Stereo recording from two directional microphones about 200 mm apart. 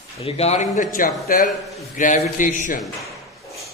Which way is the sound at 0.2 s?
30° left (ahead or behind).